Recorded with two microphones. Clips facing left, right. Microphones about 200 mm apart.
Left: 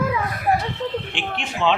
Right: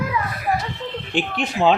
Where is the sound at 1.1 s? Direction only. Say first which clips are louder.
Right 5 dB; 40° right (ahead or behind).